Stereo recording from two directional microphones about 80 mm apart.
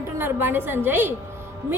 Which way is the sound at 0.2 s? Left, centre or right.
Right.